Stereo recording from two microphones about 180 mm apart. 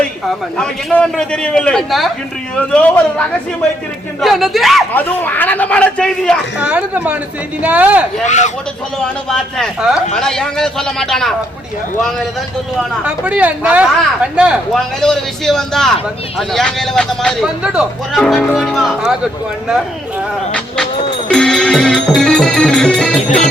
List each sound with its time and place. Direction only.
0.5 s a man's voice: 5° left (ahead or behind)
4.9 s a man's voice: 10° left (ahead or behind)
6.6 s speech: 5° right (ahead or behind)
8.2 s speech: 40° left (ahead or behind)
9.3 s speech: centre (ahead or behind)
13.1 s speech: 5° right (ahead or behind)
21.2 s music: 5° left (ahead or behind)